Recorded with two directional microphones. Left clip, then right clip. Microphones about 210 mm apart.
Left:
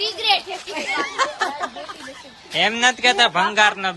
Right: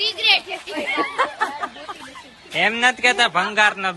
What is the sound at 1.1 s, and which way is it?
Speech, 25° right (ahead or behind).